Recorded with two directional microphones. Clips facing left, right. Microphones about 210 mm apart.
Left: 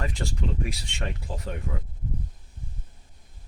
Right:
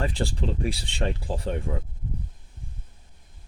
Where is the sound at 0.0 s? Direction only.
30° right (ahead or behind).